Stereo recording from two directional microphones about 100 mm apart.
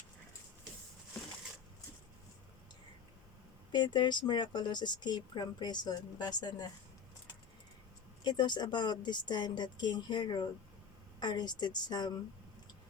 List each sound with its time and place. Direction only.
3.7 s speech: 50° left (ahead or behind)
8.2 s speech: 50° left (ahead or behind)